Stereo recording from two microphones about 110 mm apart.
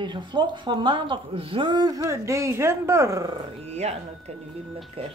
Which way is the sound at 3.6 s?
85° right.